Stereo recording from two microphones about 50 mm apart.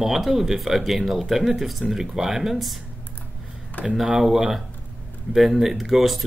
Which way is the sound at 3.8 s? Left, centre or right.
Left.